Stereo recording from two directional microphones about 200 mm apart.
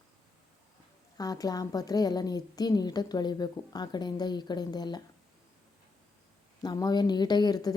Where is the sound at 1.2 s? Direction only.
20° left (ahead or behind).